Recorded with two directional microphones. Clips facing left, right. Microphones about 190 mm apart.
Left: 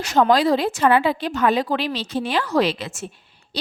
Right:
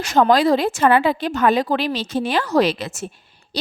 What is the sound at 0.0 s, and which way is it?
A woman's voice, 50° right (ahead or behind).